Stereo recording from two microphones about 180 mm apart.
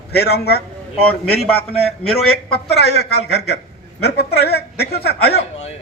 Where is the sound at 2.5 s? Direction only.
65° left (ahead or behind).